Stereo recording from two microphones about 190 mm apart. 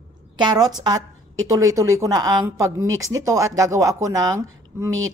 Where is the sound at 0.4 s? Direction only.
20° right (ahead or behind).